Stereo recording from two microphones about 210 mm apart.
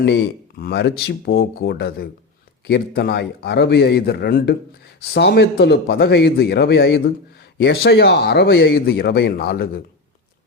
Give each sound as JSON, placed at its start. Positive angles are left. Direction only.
{"t": 0.6, "sound": "speech", "side_deg": 50}